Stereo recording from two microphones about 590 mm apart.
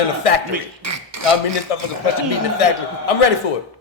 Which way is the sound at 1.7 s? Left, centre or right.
Left.